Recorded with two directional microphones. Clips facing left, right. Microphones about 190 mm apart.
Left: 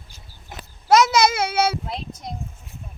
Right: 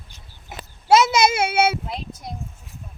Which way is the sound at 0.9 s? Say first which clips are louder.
Even; 25° right (ahead or behind).